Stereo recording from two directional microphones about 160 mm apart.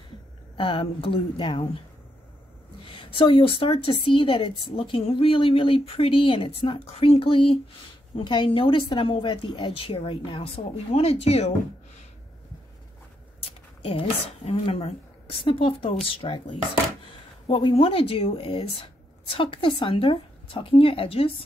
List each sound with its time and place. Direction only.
0.6 s a woman's voice: 35° left (ahead or behind)
3.0 s a woman's voice: 30° left (ahead or behind)
13.4 s a woman's voice: 35° left (ahead or behind)